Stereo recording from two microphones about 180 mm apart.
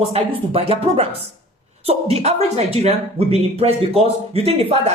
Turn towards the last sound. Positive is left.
turn(degrees=-35)  # may be behind; listen again after turning